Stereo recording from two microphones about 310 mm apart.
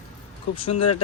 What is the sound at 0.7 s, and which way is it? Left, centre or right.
Speech, left.